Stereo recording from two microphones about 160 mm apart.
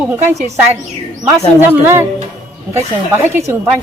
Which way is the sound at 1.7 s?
15° right (ahead or behind).